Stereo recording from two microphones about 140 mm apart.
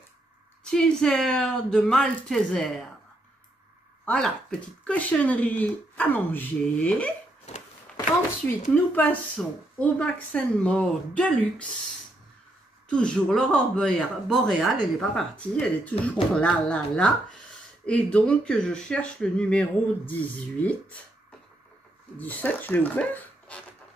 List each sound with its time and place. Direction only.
0.7 s speech: 5° left (ahead or behind)
4.0 s speech: 5° left (ahead or behind)
7.5 s a sound: 55° left (ahead or behind)
8.5 s speech: 15° left (ahead or behind)
12.9 s speech: 5° left (ahead or behind)
22.2 s speech: 10° left (ahead or behind)